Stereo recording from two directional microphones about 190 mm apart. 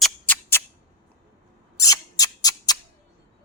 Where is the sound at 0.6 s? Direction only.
10° left (ahead or behind).